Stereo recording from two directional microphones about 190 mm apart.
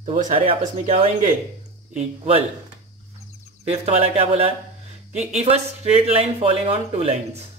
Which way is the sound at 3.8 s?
35° right (ahead or behind).